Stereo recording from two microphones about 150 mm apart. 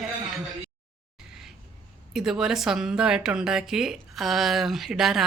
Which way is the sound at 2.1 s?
5° right (ahead or behind).